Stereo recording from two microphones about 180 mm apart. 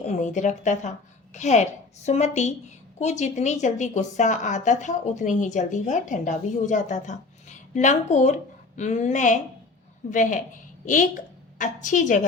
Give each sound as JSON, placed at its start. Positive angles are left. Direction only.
{"t": 0.2, "sound": "a woman's voice", "side_deg": 45}